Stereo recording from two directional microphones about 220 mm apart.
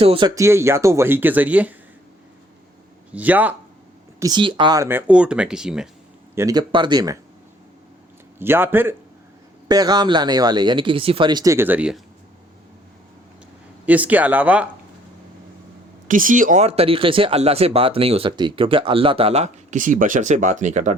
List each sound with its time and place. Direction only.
0.0 s speech: 25° right (ahead or behind); by 1.7 s 5° right (ahead or behind)
3.1 s speech: 5° right (ahead or behind)
4.2 s speech: 20° right (ahead or behind); by 5.9 s centre (ahead or behind)
6.3 s speech: 15° right (ahead or behind)
8.4 s speech: 10° right (ahead or behind)
13.8 s speech: 5° right (ahead or behind)
16.0 s speech: 40° right (ahead or behind)